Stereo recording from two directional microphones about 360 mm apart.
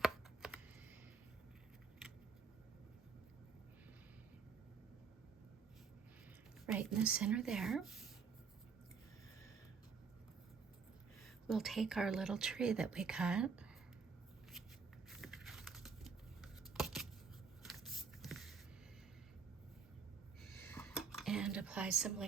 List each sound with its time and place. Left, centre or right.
0.4 s computer keyboard: centre
6.7 s speech: centre
11.4 s speech: centre
15.1 s tearing: centre
17.6 s a sound: centre
20.4 s a sound: centre